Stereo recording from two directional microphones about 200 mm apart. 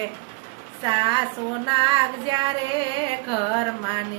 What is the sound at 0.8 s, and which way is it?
Carnatic music, 25° right (ahead or behind).